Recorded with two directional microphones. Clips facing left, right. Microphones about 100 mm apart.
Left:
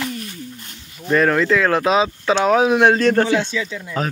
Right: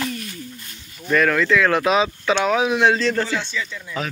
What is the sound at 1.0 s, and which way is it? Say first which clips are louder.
Speech: left 2 dB; 30° left (ahead or behind).